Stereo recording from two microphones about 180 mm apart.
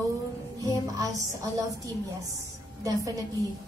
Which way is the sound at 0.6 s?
20° right (ahead or behind).